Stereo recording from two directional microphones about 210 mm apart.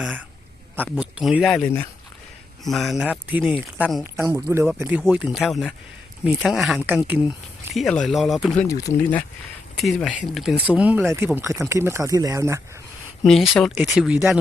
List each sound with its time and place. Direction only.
0.9 s speech: 5° right (ahead or behind)
1.5 s speech: 10° left (ahead or behind)
2.6 s speech: centre (ahead or behind)
4.3 s speech: 15° right (ahead or behind); by 8.6 s centre (ahead or behind)
8.8 s speech: 10° left (ahead or behind); by 12.6 s 15° right (ahead or behind)
13.2 s speech: centre (ahead or behind)